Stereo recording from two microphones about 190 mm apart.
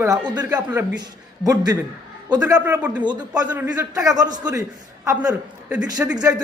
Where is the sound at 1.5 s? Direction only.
20° right (ahead or behind).